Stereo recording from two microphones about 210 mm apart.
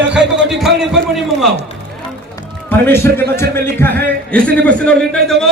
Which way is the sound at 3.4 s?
10° left (ahead or behind).